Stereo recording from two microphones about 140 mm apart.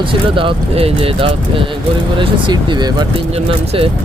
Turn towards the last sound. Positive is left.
turn(degrees=-40)  # may be behind; listen again after turning